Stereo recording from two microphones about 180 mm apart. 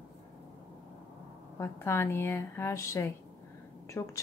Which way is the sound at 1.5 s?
15° left (ahead or behind).